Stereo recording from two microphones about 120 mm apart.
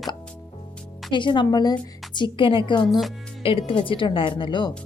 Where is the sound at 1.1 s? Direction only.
40° left (ahead or behind).